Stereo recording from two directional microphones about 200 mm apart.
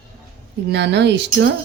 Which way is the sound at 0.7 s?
60° right (ahead or behind).